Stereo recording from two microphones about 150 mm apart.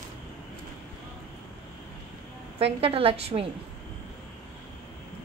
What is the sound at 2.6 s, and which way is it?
Speech, 40° right (ahead or behind).